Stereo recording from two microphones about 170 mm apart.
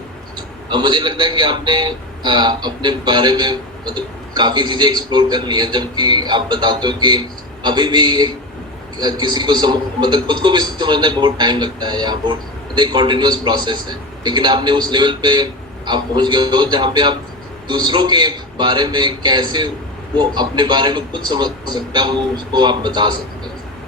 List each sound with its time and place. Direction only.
0.3 s a man's voice: 25° right (ahead or behind)